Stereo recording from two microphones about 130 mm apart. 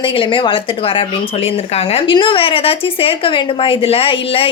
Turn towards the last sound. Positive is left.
turn(degrees=45)  # may be behind; listen again after turning